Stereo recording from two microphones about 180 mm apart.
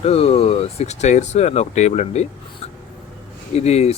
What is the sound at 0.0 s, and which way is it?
Speech, 35° left (ahead or behind).